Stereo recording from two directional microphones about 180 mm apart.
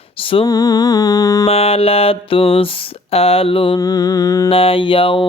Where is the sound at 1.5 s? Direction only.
35° left (ahead or behind).